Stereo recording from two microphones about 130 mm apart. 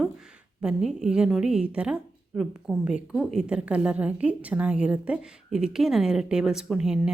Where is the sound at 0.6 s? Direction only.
5° right (ahead or behind).